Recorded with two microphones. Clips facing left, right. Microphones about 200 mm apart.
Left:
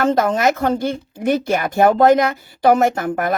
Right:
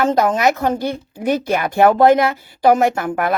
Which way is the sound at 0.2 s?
50° left (ahead or behind).